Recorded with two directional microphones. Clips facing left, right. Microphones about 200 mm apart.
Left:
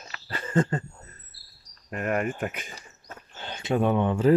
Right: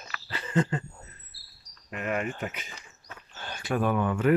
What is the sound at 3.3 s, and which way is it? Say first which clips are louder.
Speech: left 3 dB; 20° left (ahead or behind).